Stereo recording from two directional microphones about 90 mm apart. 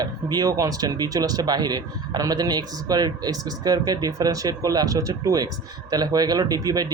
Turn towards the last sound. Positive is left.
turn(degrees=-45)  # may be behind; listen again after turning